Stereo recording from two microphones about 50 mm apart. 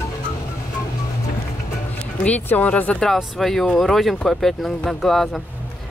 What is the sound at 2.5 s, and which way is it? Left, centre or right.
Speech, left.